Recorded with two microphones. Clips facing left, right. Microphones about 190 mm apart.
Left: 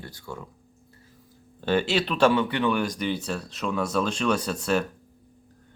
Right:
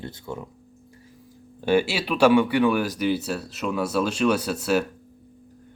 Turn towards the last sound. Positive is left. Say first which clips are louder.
# right 2 dB
turn(degrees=-5)  # may be behind; listen again after turning